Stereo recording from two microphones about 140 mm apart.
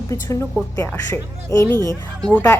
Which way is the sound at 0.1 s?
20° left (ahead or behind).